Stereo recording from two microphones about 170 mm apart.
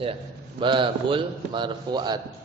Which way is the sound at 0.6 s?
30° right (ahead or behind).